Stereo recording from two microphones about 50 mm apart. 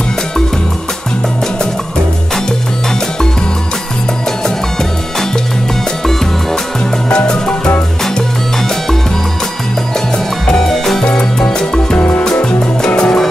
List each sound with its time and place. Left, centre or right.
7.1 s music: centre
10.4 s music: centre
11.1 s music: centre